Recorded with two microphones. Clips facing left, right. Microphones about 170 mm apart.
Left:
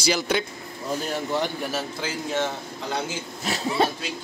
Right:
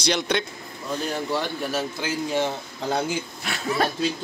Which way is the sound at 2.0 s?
10° right (ahead or behind).